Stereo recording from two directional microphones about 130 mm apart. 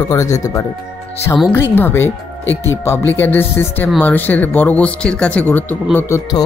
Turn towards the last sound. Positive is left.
turn(degrees=20)  # may be behind; listen again after turning